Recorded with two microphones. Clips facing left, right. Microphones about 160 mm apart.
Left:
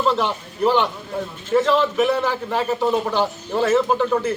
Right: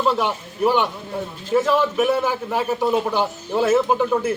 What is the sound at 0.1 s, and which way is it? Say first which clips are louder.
A man's voice: even; 10° right (ahead or behind).